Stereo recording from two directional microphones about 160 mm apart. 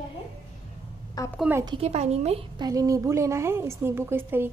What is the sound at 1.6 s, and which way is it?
Speech, 35° right (ahead or behind).